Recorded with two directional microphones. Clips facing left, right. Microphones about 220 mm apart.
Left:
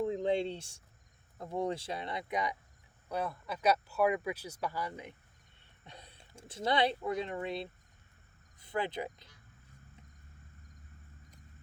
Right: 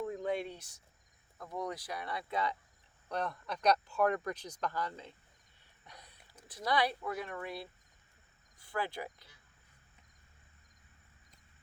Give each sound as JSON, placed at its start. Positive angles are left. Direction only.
{"t": 0.0, "sound": "a sound", "side_deg": 25}
{"t": 1.4, "sound": "speech", "side_deg": 30}
{"t": 5.8, "sound": "speech", "side_deg": 25}